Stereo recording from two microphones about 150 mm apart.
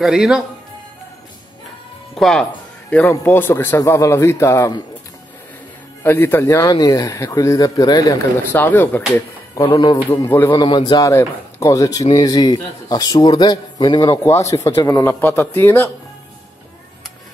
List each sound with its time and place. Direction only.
0.0 s speech: 5° right (ahead or behind)
2.1 s speech: centre (ahead or behind); by 4.8 s 20° left (ahead or behind)
6.0 s a man's voice: 15° left (ahead or behind)
8.5 s speech: 10° left (ahead or behind)
9.1 s a man's voice: 25° left (ahead or behind)
15.1 s speech: 15° left (ahead or behind)